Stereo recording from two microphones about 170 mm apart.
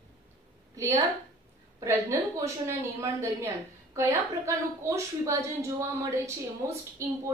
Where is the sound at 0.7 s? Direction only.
20° right (ahead or behind).